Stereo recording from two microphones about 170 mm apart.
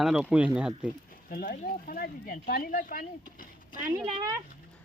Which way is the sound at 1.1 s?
60° left (ahead or behind).